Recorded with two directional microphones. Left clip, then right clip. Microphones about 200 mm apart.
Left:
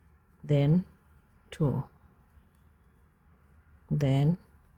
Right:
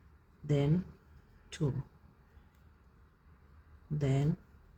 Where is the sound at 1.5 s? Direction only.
55° left (ahead or behind).